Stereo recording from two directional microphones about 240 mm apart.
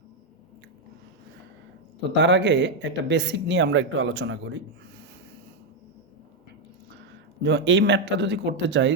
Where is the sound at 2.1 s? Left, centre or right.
Right.